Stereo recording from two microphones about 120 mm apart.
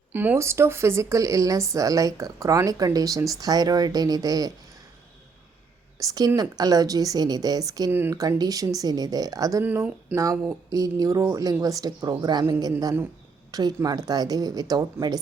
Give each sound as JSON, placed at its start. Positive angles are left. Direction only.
{"t": 0.1, "sound": "speech", "side_deg": -15}
{"t": 6.0, "sound": "a woman's voice", "side_deg": -30}
{"t": 7.9, "sound": "speech", "side_deg": -20}
{"t": 8.1, "sound": "a woman's voice", "side_deg": -30}
{"t": 9.6, "sound": "a woman's voice", "side_deg": -15}